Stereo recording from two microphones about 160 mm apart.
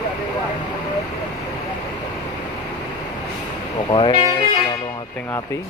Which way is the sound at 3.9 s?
35° left (ahead or behind).